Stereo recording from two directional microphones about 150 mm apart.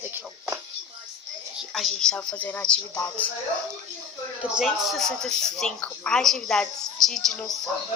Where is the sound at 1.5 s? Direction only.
Centre (ahead or behind).